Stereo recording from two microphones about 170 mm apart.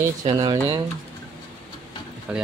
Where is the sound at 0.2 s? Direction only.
25° right (ahead or behind).